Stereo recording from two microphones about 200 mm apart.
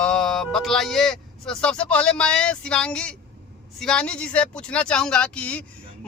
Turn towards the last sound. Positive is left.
turn(degrees=5)  # may be behind; listen again after turning